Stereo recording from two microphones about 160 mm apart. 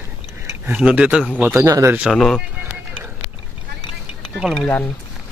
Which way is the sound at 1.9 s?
Centre (ahead or behind).